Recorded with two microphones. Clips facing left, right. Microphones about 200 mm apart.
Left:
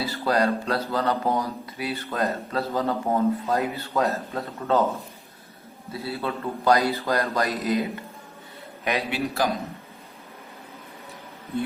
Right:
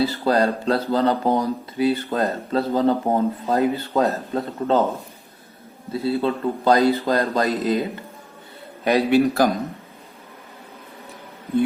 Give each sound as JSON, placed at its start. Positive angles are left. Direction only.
{"t": 0.0, "sound": "speech", "side_deg": -25}
{"t": 5.9, "sound": "speech", "side_deg": -30}
{"t": 8.8, "sound": "a man's voice", "side_deg": -35}